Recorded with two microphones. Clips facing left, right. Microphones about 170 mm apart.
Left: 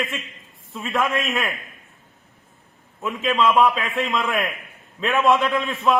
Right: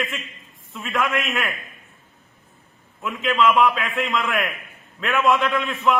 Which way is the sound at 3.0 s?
20° left (ahead or behind).